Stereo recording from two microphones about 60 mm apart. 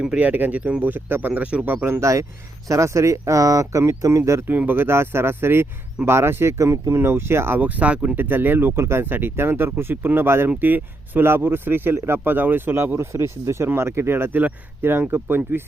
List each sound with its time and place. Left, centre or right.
0.2 s speech: right
1.3 s speech: right
1.6 s speech: right
2.0 s speech: right
4.4 s speech: right
7.6 s speech: right
8.2 s speech: right